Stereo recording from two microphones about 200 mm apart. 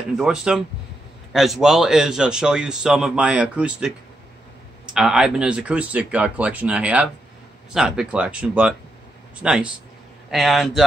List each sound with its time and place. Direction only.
0.2 s speech: 5° right (ahead or behind)
4.9 s speech: centre (ahead or behind)